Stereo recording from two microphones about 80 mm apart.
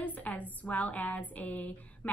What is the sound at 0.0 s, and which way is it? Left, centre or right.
A woman's voice, centre.